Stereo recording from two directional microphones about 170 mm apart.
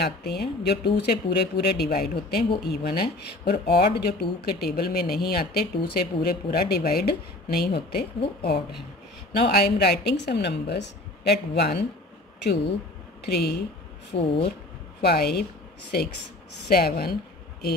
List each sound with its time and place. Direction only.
0.0 s speech: 75° left (ahead or behind)
13.2 s speech: 75° left (ahead or behind)
16.6 s speech: 65° left (ahead or behind)